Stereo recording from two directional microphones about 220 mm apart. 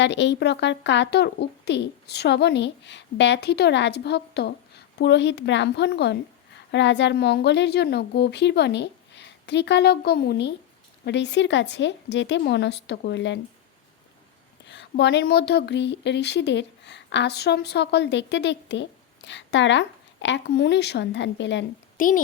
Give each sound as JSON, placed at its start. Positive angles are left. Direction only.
{"t": 0.0, "sound": "speech", "side_deg": 55}
{"t": 14.7, "sound": "speech", "side_deg": 50}
{"t": 21.9, "sound": "a child's voice", "side_deg": 40}